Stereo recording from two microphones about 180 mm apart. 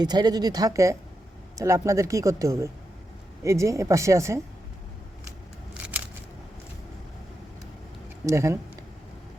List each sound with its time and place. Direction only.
0.0 s speech: 25° right (ahead or behind)
8.3 s speech: 15° right (ahead or behind)